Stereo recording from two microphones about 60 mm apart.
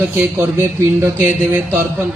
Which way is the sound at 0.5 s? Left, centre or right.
Right.